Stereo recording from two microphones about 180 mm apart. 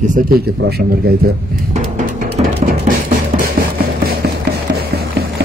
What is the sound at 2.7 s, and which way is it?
Music, 50° right (ahead or behind).